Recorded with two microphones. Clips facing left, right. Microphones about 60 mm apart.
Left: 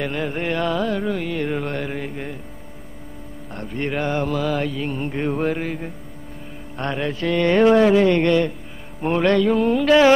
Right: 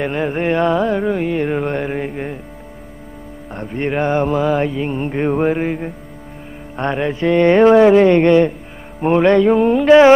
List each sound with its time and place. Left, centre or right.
0.0 s music: right
3.5 s music: right